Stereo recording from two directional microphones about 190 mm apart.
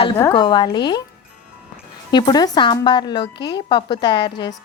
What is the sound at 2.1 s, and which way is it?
A woman's voice, 20° left (ahead or behind).